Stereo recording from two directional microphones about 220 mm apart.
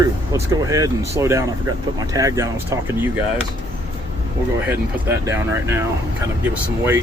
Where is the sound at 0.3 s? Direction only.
15° right (ahead or behind).